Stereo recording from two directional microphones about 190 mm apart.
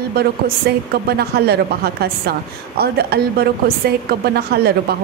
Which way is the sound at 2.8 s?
55° right (ahead or behind).